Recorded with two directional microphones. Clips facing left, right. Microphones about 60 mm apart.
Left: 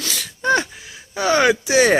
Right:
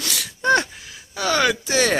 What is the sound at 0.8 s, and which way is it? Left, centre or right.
Speech, centre.